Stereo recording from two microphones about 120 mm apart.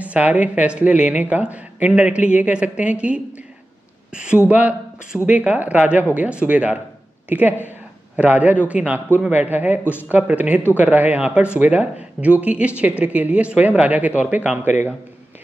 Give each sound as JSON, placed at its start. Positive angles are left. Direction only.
{"t": 0.0, "sound": "speech", "side_deg": -10}
{"t": 9.8, "sound": "speech", "side_deg": 15}
{"t": 10.1, "sound": "speech", "side_deg": -10}